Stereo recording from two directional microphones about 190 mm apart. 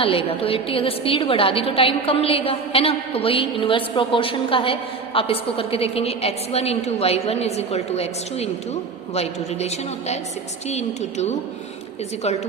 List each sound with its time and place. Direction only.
0.0 s a woman's voice: 30° left (ahead or behind)